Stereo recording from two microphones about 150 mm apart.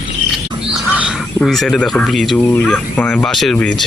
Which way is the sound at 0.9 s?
5° right (ahead or behind).